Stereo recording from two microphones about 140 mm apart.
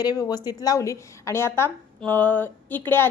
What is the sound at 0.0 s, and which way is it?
A woman's voice, 25° left (ahead or behind).